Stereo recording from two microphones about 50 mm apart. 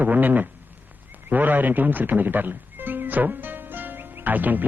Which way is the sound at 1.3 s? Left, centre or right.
Right.